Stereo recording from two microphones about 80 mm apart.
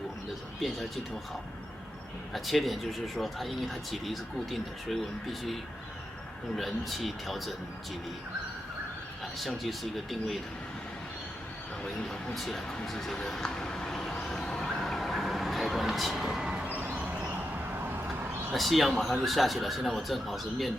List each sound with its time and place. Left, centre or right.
0.6 s speech: centre
2.3 s speech: centre
6.6 s speech: centre
9.4 s speech: centre
11.8 s a sound: centre
16.6 s a sound: right
18.5 s speech: centre